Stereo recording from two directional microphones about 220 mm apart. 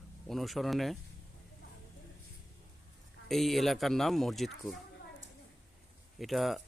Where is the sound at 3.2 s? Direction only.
Centre (ahead or behind).